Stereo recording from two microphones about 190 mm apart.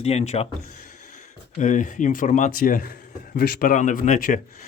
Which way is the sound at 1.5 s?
40° left (ahead or behind).